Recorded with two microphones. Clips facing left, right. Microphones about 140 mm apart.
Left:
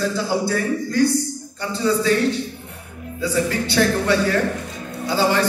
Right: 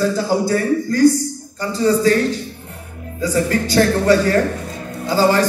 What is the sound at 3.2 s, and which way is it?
A man's voice, 40° right (ahead or behind).